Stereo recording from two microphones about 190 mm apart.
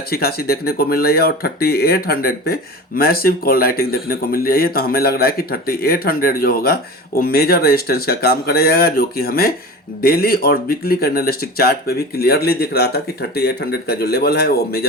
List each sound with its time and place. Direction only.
0.1 s speech: 55° left (ahead or behind)